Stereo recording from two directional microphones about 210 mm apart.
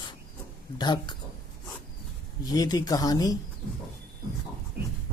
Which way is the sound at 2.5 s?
15° left (ahead or behind).